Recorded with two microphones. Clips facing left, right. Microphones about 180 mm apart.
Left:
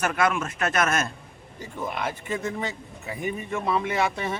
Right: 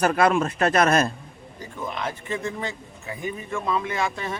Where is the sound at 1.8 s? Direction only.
10° left (ahead or behind).